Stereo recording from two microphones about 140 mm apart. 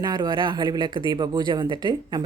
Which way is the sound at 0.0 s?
30° right (ahead or behind).